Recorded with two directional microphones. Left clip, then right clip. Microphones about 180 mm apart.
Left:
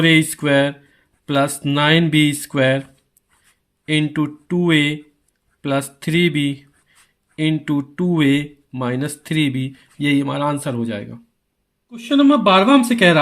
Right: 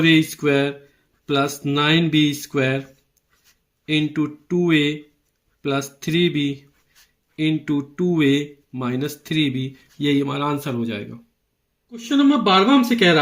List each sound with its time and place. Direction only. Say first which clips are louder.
0.0 s speech: left 2 dB; 45° left (ahead or behind)
3.8 s speech: left 2 dB; 45° left (ahead or behind)
11.9 s speech: left 3 dB; 55° left (ahead or behind)